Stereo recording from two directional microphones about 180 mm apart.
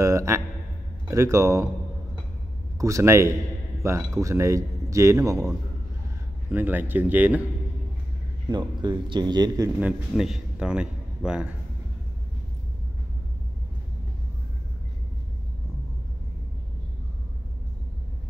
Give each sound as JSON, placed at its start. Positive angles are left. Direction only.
{"t": 0.0, "sound": "a sound", "side_deg": -15}
{"t": 1.0, "sound": "a man's voice", "side_deg": -15}
{"t": 2.8, "sound": "a man's voice", "side_deg": -15}
{"t": 6.5, "sound": "a man's voice", "side_deg": -10}
{"t": 8.5, "sound": "a man's voice", "side_deg": -25}
{"t": 9.8, "sound": "a man's voice", "side_deg": -5}